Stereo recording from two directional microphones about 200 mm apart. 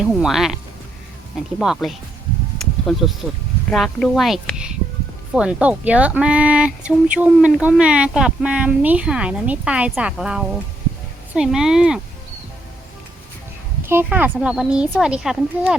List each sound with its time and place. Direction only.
0.0 s speech: centre (ahead or behind)
13.8 s speech: 10° right (ahead or behind)